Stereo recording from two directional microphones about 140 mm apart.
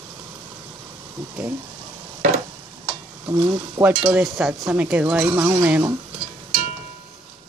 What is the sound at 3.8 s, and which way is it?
Stir, 10° right (ahead or behind).